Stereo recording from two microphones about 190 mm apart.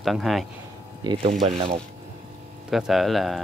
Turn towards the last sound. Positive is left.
turn(degrees=0)  # may be behind; listen again after turning